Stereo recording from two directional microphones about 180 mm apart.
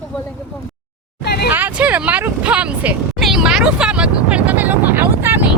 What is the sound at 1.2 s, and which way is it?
Vehicle, 65° left (ahead or behind).